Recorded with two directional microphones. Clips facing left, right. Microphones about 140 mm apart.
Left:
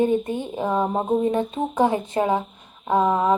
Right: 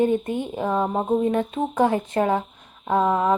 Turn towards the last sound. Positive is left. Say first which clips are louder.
# left 1 dB
turn(degrees=15)  # may be behind; listen again after turning